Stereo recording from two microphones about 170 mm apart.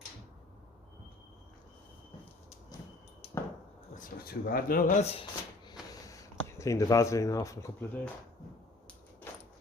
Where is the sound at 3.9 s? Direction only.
55° left (ahead or behind).